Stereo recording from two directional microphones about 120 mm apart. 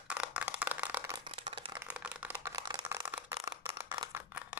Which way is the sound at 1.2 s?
45° right (ahead or behind).